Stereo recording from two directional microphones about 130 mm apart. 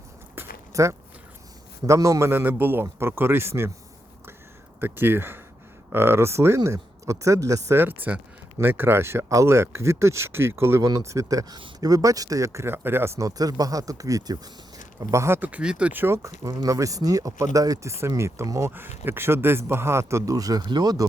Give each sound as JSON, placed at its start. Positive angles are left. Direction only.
{"t": 0.3, "sound": "biting", "side_deg": -20}
{"t": 1.9, "sound": "speech", "side_deg": -25}
{"t": 4.8, "sound": "speech", "side_deg": -15}